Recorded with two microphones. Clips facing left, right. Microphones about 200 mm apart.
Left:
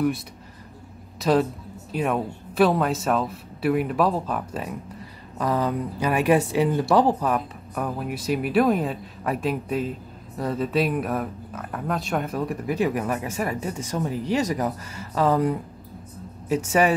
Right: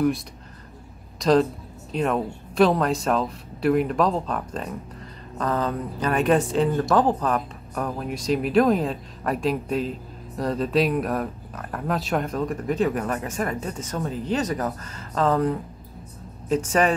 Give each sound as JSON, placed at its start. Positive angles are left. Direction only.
{"t": 1.2, "sound": "speech", "side_deg": 5}